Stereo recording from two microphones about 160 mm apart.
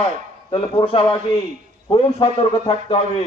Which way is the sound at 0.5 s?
35° left (ahead or behind).